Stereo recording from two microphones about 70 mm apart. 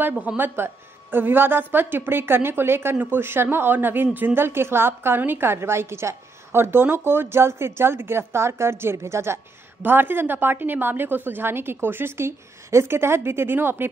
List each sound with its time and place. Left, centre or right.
0.4 s a woman's voice: right